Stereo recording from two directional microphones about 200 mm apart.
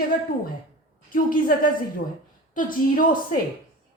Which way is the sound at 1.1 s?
45° left (ahead or behind).